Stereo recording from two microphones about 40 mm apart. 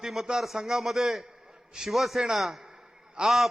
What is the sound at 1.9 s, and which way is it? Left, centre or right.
Speech, centre.